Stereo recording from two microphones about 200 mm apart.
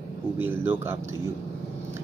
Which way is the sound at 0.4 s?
10° right (ahead or behind).